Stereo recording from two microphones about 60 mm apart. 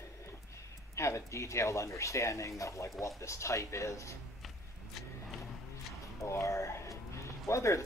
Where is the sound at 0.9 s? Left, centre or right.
Left.